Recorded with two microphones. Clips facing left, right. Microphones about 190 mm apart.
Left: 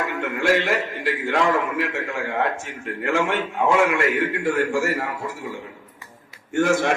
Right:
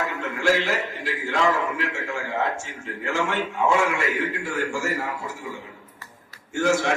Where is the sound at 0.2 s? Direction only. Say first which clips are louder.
Left 3 dB; 60° left (ahead or behind).